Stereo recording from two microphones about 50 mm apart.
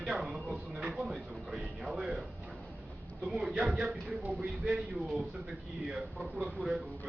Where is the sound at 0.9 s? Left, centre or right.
Centre.